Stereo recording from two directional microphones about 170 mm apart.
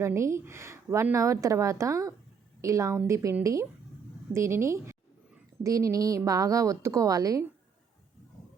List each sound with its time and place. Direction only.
0.0 s a woman's voice: 15° right (ahead or behind)